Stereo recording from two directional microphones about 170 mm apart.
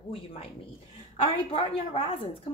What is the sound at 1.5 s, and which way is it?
Speech, 35° left (ahead or behind).